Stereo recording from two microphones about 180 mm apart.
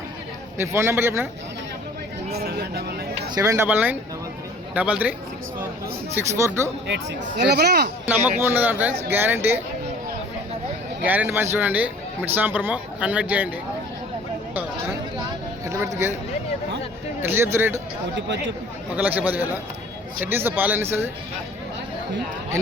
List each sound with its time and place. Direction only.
0.6 s a man's voice: 15° right (ahead or behind)
2.4 s speech: 60° right (ahead or behind)
3.3 s a man's voice: 20° right (ahead or behind)
6.1 s a man's voice: 15° right (ahead or behind)
6.8 s speech: 70° right (ahead or behind)
8.0 s a man's voice: 10° right (ahead or behind)
11.0 s a man's voice: 10° right (ahead or behind)
15.6 s speech: 15° right (ahead or behind)
17.2 s a man's voice: 15° right (ahead or behind)
18.9 s a man's voice: 10° right (ahead or behind)